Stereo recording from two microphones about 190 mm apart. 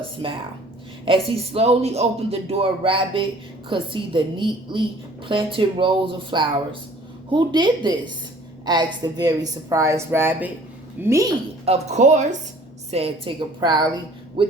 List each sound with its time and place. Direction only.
1.0 s a woman's voice: 30° right (ahead or behind)
11.6 s a woman's voice: 35° right (ahead or behind)